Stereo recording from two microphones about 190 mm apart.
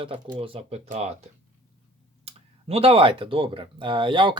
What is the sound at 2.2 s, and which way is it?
Speech, 30° right (ahead or behind).